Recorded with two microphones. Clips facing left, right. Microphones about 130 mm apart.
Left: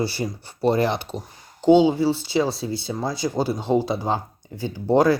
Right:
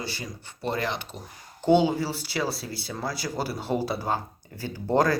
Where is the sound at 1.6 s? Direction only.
15° left (ahead or behind).